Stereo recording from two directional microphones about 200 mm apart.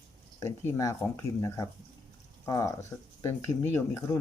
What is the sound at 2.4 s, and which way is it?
Speech, 15° left (ahead or behind).